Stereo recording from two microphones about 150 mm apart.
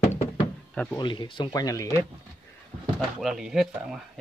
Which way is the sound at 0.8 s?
30° left (ahead or behind).